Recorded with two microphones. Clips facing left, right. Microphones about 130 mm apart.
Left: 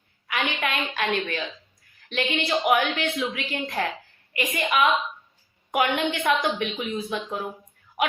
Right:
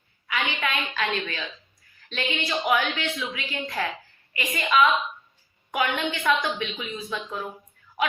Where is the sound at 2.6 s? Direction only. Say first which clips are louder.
Left 1 dB; 45° left (ahead or behind).